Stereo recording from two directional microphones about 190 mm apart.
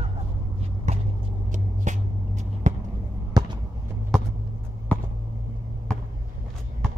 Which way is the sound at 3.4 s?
20° right (ahead or behind).